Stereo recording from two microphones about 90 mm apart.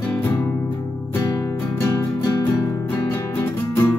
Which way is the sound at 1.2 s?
45° left (ahead or behind).